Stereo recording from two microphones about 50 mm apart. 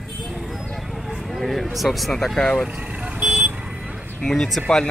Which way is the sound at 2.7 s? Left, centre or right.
Right.